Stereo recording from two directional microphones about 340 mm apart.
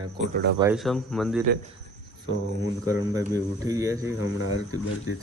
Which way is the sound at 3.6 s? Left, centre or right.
Centre.